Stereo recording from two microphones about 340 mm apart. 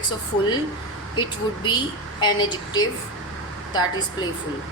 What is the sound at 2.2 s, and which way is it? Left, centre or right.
Speech, centre.